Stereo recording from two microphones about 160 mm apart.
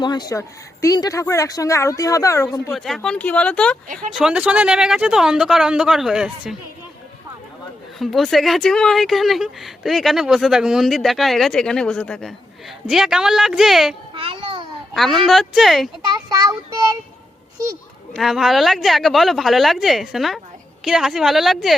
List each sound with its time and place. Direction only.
0.0 s speech: 25° left (ahead or behind)
2.7 s speech: centre (ahead or behind)
4.1 s speech: 5° right (ahead or behind)
7.9 s speech: centre (ahead or behind)
14.1 s a sound: 35° right (ahead or behind)
14.9 s speech: centre (ahead or behind)
16.1 s child singing: 25° right (ahead or behind)
18.1 s speech: centre (ahead or behind)